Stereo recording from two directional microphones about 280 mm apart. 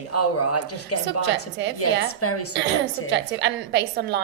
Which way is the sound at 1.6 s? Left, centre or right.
Right.